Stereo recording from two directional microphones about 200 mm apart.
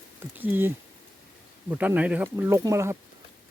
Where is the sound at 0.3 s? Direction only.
10° right (ahead or behind).